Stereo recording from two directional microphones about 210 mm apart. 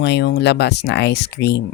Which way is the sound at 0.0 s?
55° left (ahead or behind).